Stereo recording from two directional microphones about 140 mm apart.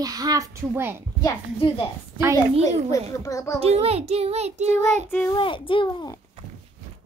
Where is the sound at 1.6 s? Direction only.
35° left (ahead or behind).